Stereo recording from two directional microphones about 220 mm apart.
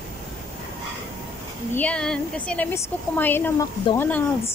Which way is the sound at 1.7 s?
5° left (ahead or behind).